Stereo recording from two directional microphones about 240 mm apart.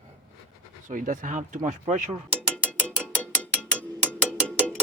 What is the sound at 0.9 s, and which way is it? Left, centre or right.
Speech, right.